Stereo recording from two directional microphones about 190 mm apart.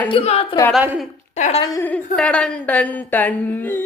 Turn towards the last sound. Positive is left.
turn(degrees=10)  # may be behind; listen again after turning